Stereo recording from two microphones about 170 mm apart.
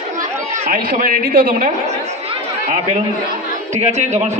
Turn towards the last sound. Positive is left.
turn(degrees=-40)  # may be behind; listen again after turning